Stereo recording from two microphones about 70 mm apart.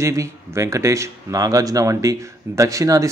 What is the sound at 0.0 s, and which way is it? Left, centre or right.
A man's voice, right.